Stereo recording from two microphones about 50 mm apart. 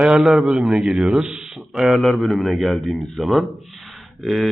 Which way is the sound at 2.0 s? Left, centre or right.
Centre.